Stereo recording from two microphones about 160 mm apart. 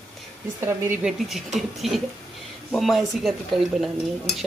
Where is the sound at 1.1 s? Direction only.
Centre (ahead or behind).